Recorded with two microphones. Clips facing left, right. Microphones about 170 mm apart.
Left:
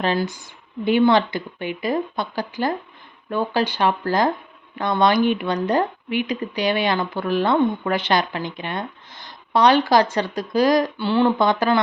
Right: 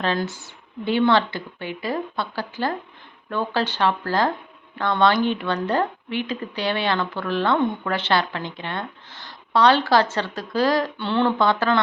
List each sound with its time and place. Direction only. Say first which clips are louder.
0.0 s speech: left 2 dB; 15° left (ahead or behind)
11.3 s speech: left 2 dB; 15° left (ahead or behind)